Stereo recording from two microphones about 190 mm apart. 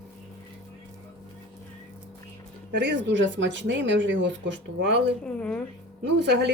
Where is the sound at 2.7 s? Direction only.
65° right (ahead or behind).